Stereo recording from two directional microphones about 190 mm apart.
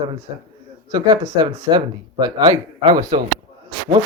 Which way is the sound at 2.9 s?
40° right (ahead or behind).